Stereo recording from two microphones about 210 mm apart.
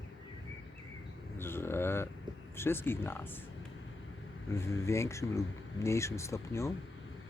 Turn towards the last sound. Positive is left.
turn(degrees=15)  # may be behind; listen again after turning